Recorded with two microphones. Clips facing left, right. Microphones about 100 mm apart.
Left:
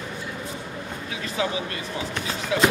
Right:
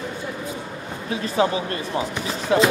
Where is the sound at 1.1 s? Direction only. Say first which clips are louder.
Right 7 dB; 35° right (ahead or behind).